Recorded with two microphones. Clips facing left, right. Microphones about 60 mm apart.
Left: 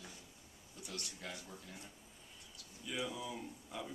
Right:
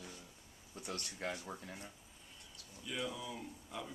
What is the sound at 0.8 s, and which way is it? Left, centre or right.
Speech, right.